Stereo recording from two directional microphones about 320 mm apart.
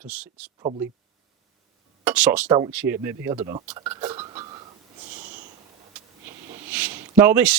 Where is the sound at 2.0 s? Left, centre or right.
Centre.